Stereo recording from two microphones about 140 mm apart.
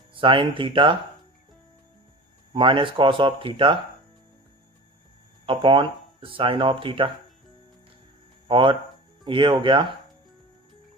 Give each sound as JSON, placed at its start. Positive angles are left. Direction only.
{"t": 0.1, "sound": "speech", "side_deg": -40}
{"t": 2.5, "sound": "speech", "side_deg": -35}
{"t": 5.5, "sound": "speech", "side_deg": -35}
{"t": 8.4, "sound": "speech", "side_deg": -35}